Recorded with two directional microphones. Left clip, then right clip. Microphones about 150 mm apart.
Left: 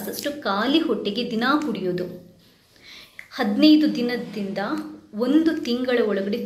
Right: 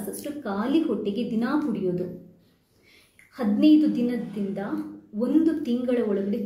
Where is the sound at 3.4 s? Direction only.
15° right (ahead or behind).